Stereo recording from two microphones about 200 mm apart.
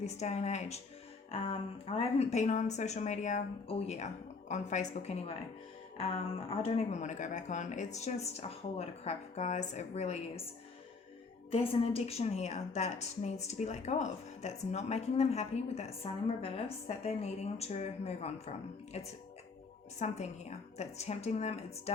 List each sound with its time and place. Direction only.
0.0 s a woman's voice: 35° left (ahead or behind)
11.5 s a woman's voice: 30° left (ahead or behind)